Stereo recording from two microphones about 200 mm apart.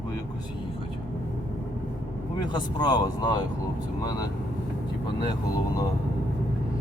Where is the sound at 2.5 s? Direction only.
20° left (ahead or behind).